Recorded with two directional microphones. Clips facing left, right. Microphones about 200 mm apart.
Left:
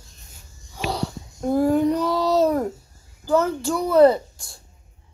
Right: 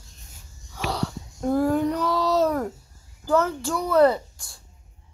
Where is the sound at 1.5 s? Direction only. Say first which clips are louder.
Left 4 dB; 10° left (ahead or behind).